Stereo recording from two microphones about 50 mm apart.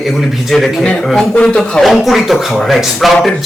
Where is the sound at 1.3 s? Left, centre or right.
Left.